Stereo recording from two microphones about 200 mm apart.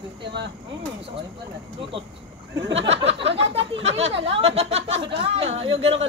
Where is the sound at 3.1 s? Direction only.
30° right (ahead or behind).